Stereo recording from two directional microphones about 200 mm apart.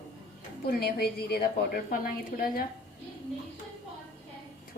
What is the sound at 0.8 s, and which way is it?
A woman's voice, 55° left (ahead or behind).